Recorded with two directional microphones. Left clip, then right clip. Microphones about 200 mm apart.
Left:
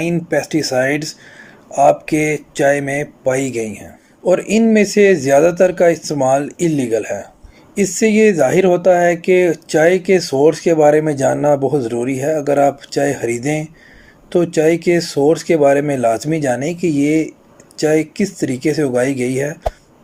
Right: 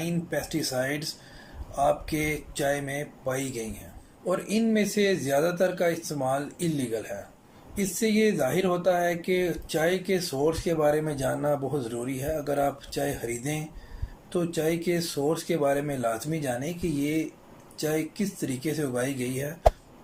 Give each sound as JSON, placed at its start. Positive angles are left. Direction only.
{"t": 0.0, "sound": "speech", "side_deg": 40}